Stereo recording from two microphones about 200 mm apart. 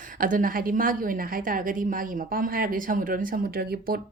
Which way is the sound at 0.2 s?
45° right (ahead or behind).